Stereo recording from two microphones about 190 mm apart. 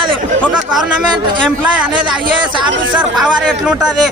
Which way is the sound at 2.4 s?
25° right (ahead or behind).